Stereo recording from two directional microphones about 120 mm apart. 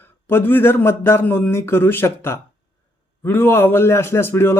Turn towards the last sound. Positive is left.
turn(degrees=20)  # may be behind; listen again after turning